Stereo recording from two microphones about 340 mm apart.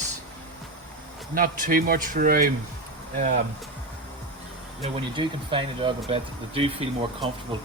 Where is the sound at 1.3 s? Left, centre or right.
Right.